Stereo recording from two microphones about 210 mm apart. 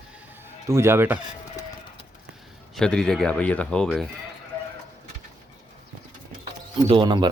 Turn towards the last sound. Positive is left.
turn(degrees=-20)  # may be behind; listen again after turning